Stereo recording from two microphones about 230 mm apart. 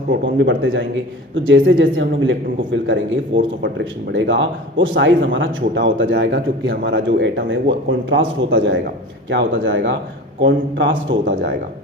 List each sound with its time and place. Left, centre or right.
0.1 s a man's voice: right